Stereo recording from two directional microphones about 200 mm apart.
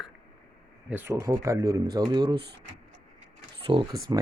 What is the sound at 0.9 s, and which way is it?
Speech, 10° right (ahead or behind).